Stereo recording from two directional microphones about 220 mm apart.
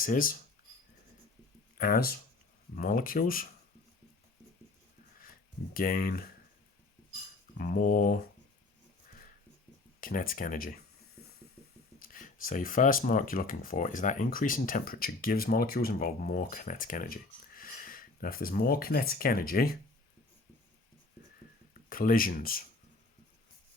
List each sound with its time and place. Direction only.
0.0 s speech: 40° left (ahead or behind)
1.8 s speech: 40° left (ahead or behind)
5.7 s speech: 40° left (ahead or behind)
7.5 s speech: 40° left (ahead or behind)
10.0 s speech: 40° left (ahead or behind)
11.9 s speech: 40° left (ahead or behind)
21.8 s speech: 40° left (ahead or behind)